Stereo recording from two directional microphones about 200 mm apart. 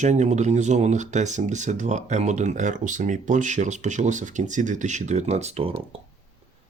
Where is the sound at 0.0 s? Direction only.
35° right (ahead or behind).